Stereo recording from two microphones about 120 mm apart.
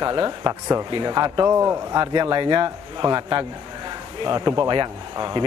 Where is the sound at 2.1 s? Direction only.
40° right (ahead or behind).